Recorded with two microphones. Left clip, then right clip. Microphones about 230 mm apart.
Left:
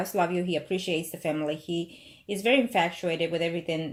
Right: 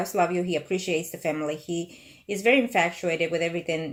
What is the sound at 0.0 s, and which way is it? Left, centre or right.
Speech, centre.